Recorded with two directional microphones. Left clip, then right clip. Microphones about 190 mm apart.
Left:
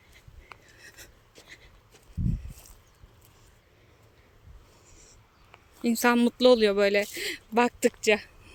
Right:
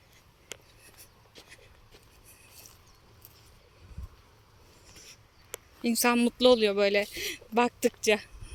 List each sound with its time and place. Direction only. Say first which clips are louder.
1.4 s walk: left 1 dB; centre (ahead or behind)
5.8 s speech: left 2 dB; 20° left (ahead or behind)